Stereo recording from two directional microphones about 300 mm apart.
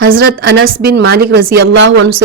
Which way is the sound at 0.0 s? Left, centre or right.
Right.